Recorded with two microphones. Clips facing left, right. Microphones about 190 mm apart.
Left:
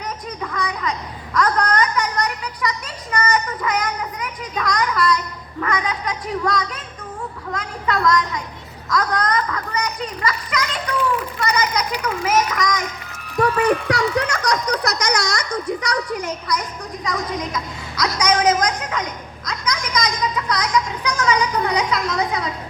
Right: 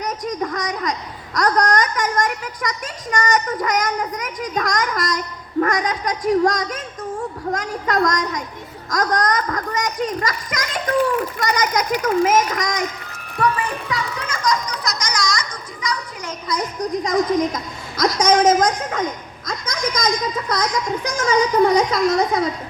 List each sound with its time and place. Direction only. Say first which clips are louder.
0.0 s a woman's voice: right 5 dB; 40° right (ahead or behind)
13.6 s a child's voice: left 7 dB; 70° left (ahead or behind)
17.0 s a woman's voice: right 7 dB; 45° right (ahead or behind)